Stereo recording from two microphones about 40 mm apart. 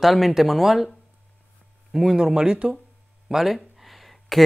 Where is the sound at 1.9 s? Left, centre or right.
Centre.